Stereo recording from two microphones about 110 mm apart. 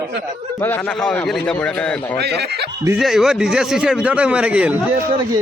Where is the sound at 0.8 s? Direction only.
5° left (ahead or behind).